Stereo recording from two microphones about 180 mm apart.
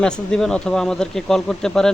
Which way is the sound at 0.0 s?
5° left (ahead or behind).